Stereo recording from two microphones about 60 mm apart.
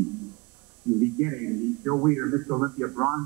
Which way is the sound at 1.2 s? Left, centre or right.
Centre.